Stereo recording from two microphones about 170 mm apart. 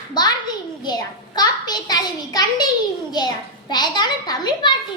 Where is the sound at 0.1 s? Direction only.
25° left (ahead or behind).